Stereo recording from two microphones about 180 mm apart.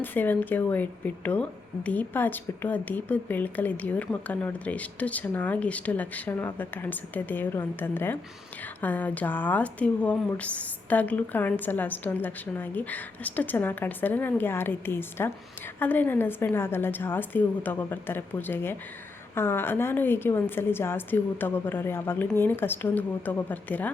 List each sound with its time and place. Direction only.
0.0 s speech: 10° left (ahead or behind)